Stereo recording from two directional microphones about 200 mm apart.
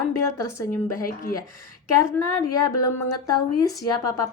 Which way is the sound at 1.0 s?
45° left (ahead or behind).